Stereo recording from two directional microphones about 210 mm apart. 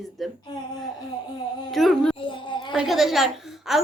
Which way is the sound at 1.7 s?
Centre (ahead or behind).